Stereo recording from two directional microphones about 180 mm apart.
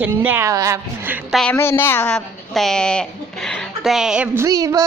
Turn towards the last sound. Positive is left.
turn(degrees=-20)  # may be behind; listen again after turning